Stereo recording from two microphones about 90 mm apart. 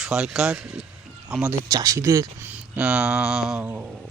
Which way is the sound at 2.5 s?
15° right (ahead or behind).